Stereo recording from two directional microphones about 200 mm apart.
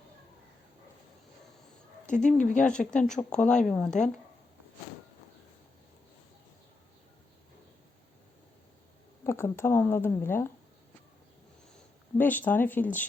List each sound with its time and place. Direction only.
2.0 s speech: 40° left (ahead or behind)
2.6 s speech: 5° left (ahead or behind)
9.2 s speech: 15° left (ahead or behind)
12.1 s speech: 10° left (ahead or behind)